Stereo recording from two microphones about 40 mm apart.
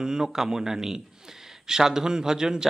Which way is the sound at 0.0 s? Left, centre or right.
Centre.